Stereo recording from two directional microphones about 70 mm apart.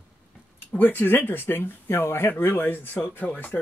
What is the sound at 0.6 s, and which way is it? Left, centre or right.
Speech, left.